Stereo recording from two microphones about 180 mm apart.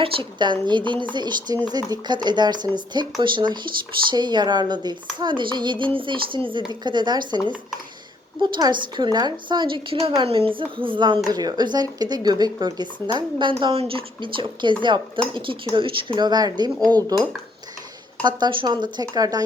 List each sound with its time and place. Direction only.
0.0 s speech: 25° right (ahead or behind)
18.2 s speech: 25° right (ahead or behind)